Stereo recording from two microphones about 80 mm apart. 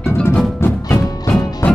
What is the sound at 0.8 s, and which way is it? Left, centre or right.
Music, left.